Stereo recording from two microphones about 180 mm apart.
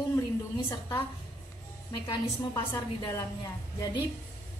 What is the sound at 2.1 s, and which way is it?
A woman's voice, 25° left (ahead or behind).